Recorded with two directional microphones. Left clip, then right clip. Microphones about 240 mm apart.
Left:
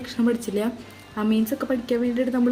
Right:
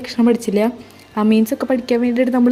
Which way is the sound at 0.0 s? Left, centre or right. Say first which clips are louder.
Right 8 dB; right.